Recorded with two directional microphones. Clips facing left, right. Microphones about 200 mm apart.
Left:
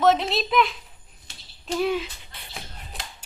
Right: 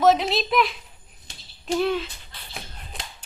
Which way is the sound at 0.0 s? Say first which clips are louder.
Right 1 dB; centre (ahead or behind).